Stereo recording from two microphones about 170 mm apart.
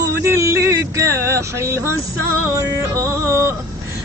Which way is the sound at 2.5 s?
15° right (ahead or behind).